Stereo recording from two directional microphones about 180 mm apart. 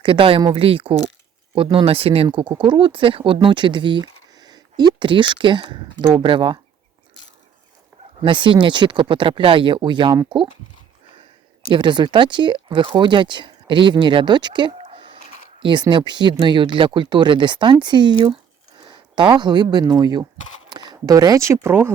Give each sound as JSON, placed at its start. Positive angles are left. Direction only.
{"t": 0.0, "sound": "speech", "side_deg": -30}
{"t": 8.2, "sound": "speech", "side_deg": -30}
{"t": 11.7, "sound": "speech", "side_deg": -25}